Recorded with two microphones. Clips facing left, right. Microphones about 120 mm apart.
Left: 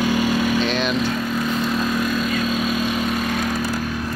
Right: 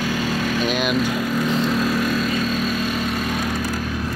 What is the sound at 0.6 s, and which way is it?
Speech, 10° right (ahead or behind).